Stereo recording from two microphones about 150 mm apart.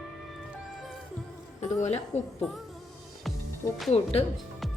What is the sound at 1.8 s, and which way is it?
Speech, 50° left (ahead or behind).